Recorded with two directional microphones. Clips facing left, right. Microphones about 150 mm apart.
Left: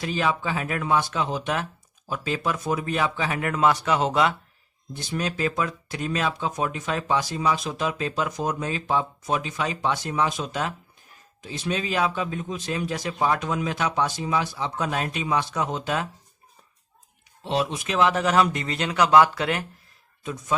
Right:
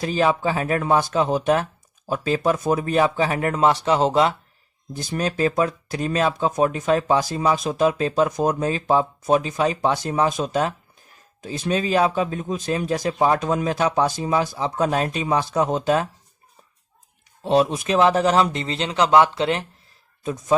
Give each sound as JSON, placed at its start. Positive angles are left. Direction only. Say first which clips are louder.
{"t": 0.0, "sound": "speech", "louder": "right 5 dB", "side_deg": -40}
{"t": 17.4, "sound": "a man's voice", "louder": "right 7 dB", "side_deg": -40}
{"t": 20.2, "sound": "speech", "louder": "right 7 dB", "side_deg": -40}